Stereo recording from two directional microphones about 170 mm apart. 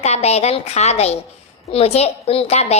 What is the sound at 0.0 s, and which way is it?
Speech, 40° left (ahead or behind).